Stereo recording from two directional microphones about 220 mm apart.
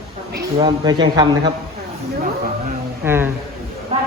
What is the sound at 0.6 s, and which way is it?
Speech, 20° right (ahead or behind).